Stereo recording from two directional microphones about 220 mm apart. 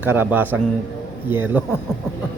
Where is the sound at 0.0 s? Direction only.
5° right (ahead or behind).